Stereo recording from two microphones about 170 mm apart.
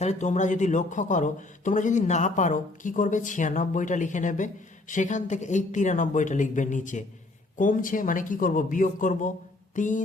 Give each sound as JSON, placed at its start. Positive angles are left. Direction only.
{"t": 0.0, "sound": "speech", "side_deg": 45}